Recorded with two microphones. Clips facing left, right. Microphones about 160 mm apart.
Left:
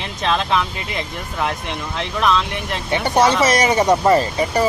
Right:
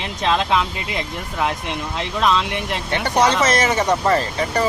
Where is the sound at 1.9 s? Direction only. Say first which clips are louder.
Left 1 dB; 15° right (ahead or behind).